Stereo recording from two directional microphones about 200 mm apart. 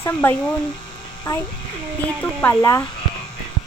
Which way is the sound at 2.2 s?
10° left (ahead or behind).